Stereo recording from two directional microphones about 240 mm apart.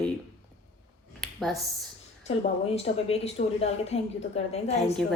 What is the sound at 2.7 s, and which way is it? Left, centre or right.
A woman's voice, left.